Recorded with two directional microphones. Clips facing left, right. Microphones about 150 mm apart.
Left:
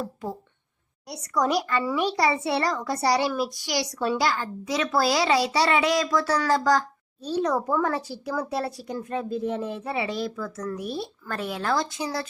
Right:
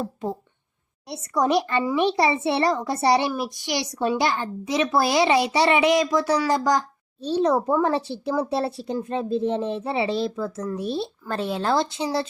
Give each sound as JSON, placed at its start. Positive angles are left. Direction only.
{"t": 0.0, "sound": "speech", "side_deg": -25}